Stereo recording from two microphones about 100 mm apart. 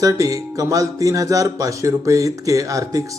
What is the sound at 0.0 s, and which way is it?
Speech, 35° right (ahead or behind).